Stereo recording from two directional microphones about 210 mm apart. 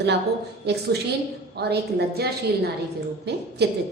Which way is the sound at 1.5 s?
50° right (ahead or behind).